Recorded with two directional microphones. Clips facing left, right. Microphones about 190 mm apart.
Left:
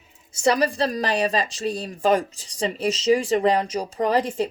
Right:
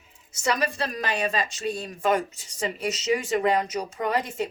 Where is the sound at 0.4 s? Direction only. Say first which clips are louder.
Left 6 dB; 35° left (ahead or behind).